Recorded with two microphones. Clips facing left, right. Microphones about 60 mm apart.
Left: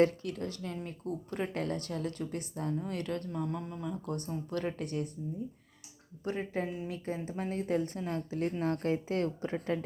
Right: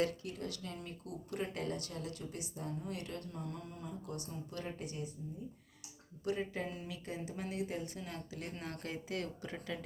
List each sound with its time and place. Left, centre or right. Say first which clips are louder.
0.4 s a woman's voice: left 5 dB; left
4.5 s speech: left 9 dB; left
6.2 s speech: left 3 dB; left